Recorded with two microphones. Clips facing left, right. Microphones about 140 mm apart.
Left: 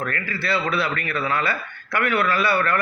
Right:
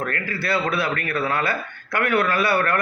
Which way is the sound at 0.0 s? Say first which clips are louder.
Right 1 dB; 50° right (ahead or behind).